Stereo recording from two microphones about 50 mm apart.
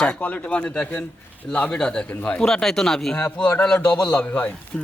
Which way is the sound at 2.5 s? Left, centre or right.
Centre.